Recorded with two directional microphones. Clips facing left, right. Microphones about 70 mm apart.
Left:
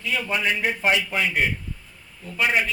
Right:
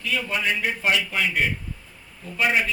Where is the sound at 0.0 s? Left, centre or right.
Left.